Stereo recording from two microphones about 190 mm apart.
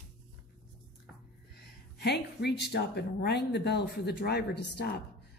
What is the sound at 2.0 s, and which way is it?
A woman's voice, 60° left (ahead or behind).